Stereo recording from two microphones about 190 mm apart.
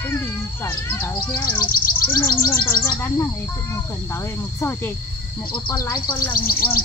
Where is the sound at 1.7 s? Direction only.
50° left (ahead or behind).